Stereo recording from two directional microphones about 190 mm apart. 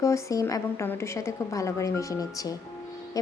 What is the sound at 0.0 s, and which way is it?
A woman's voice, 15° left (ahead or behind).